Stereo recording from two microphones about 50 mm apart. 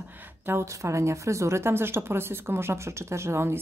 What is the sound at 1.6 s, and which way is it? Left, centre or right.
Speech, right.